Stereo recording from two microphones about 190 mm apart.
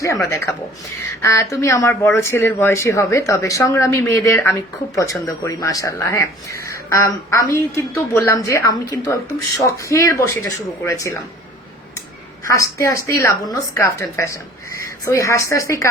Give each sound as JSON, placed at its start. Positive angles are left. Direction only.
{"t": 0.0, "sound": "speech", "side_deg": 15}
{"t": 12.5, "sound": "speech", "side_deg": 15}